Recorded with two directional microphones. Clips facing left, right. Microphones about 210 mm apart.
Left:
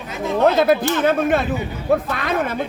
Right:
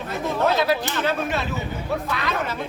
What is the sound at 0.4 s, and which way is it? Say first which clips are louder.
Speech: left 7 dB; 50° left (ahead or behind).